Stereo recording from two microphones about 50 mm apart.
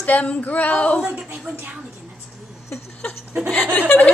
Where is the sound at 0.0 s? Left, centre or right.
Left.